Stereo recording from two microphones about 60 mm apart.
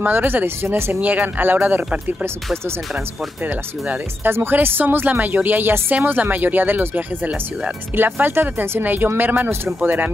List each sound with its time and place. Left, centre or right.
0.0 s speech: right
1.0 s speech: right
3.4 s speech: right